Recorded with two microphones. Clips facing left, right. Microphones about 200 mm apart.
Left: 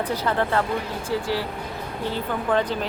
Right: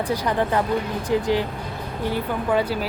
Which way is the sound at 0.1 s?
15° right (ahead or behind).